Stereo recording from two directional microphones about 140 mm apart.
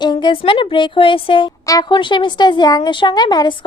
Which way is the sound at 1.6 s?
25° left (ahead or behind).